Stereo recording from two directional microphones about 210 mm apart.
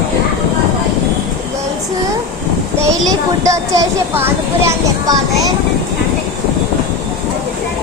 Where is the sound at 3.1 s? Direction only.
15° right (ahead or behind).